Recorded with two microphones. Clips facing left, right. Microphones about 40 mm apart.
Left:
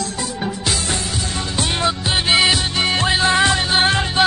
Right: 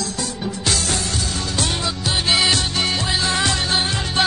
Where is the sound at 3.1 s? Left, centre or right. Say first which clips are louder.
Left 5 dB; left.